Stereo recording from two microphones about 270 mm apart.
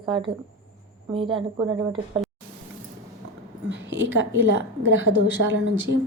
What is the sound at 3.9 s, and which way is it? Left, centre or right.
A woman's voice, right.